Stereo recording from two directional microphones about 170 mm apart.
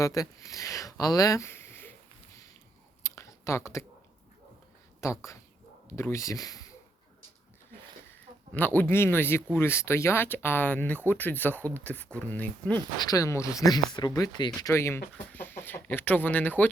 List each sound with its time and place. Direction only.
0.0 s speech: 20° left (ahead or behind)
3.0 s chewing: 15° left (ahead or behind)
5.0 s speech: 15° left (ahead or behind)
8.5 s speech: 10° left (ahead or behind)
13.0 s speech: 20° left (ahead or behind)